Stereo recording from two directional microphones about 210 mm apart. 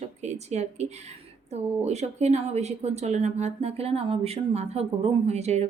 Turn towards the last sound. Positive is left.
turn(degrees=-30)  # may be behind; listen again after turning